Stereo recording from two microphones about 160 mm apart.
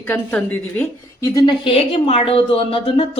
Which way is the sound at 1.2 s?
30° left (ahead or behind).